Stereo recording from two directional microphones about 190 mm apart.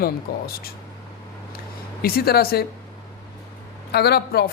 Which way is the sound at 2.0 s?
55° left (ahead or behind).